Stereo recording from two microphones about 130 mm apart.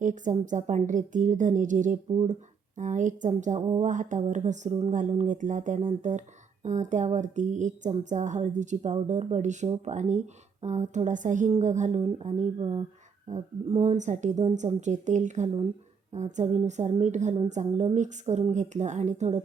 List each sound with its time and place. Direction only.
0.0 s a woman's voice: 70° right (ahead or behind)
12.5 s speech: 45° right (ahead or behind)
13.2 s a woman's voice: 60° right (ahead or behind)